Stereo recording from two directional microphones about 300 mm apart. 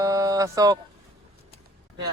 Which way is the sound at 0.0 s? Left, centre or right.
Centre.